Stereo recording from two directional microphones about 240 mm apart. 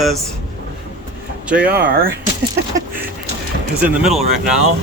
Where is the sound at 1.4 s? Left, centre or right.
Centre.